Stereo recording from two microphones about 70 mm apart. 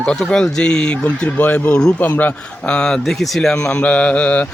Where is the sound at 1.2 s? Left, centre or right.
Left.